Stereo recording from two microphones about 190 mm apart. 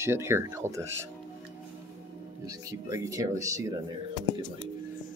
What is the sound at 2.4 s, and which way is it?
Speech, 20° right (ahead or behind).